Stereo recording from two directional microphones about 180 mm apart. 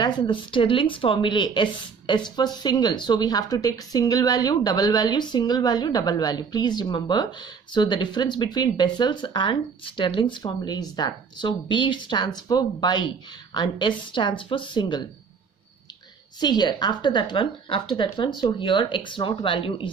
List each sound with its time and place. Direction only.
0.0 s speech: 25° left (ahead or behind)
16.3 s speech: 25° left (ahead or behind)